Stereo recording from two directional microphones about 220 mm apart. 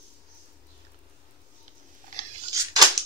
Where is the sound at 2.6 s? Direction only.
15° right (ahead or behind).